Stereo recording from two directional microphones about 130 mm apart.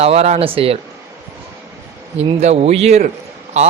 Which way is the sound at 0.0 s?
55° right (ahead or behind).